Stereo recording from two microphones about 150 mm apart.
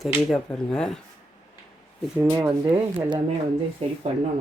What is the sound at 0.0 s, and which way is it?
Speech, centre (ahead or behind).